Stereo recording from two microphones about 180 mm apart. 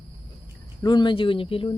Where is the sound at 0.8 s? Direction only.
25° left (ahead or behind).